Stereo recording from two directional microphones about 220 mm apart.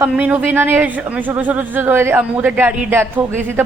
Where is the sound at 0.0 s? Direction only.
5° right (ahead or behind).